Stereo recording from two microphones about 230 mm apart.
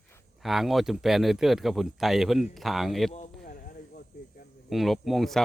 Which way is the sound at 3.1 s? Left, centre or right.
Left.